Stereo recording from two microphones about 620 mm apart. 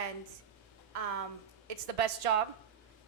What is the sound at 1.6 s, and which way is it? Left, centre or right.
Speech, right.